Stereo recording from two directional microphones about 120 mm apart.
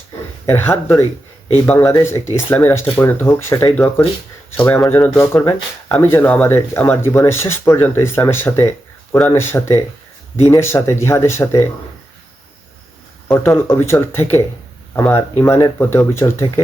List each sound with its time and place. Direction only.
0.4 s speech: 15° left (ahead or behind)
13.2 s speech: 20° left (ahead or behind)